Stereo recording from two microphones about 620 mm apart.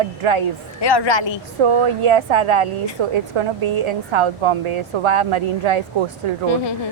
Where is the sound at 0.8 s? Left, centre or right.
Left.